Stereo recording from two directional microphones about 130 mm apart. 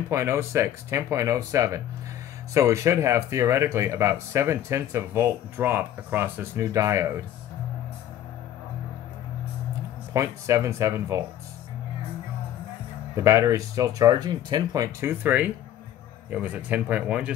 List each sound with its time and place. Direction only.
0.1 s speech: 20° right (ahead or behind)
10.1 s speech: 20° right (ahead or behind)
13.1 s speech: 20° right (ahead or behind)